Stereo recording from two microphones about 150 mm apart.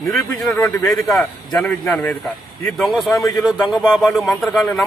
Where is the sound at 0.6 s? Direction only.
15° left (ahead or behind).